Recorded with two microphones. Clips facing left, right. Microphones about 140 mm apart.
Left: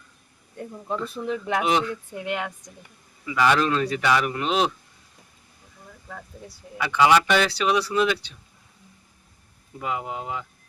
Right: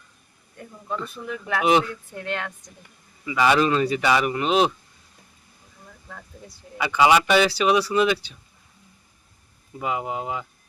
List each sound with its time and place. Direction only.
1.1 s speech: 25° left (ahead or behind)
1.6 s speech: 5° right (ahead or behind)
2.1 s speech: 10° left (ahead or behind)
3.2 s speech: 5° right (ahead or behind)
6.7 s speech: 5° right (ahead or behind)
9.7 s speech: 10° right (ahead or behind)